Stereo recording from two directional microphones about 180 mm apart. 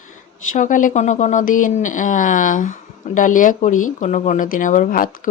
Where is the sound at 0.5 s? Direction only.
45° left (ahead or behind).